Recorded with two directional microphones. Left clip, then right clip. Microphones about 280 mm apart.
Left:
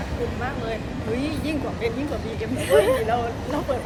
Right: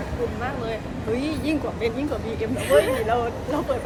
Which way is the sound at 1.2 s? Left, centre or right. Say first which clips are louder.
Right 1 dB; centre.